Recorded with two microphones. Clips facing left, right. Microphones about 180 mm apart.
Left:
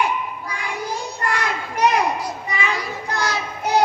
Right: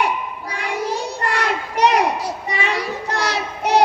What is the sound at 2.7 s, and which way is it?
Child singing, 70° right (ahead or behind).